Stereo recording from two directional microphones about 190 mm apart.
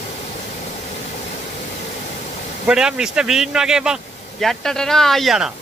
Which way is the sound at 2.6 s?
5° right (ahead or behind).